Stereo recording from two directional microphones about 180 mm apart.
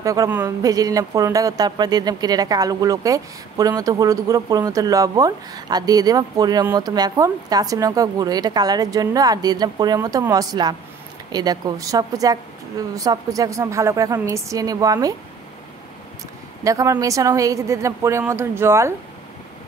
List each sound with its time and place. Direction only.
0.0 s speech: 20° right (ahead or behind)
16.6 s a woman's voice: 20° right (ahead or behind)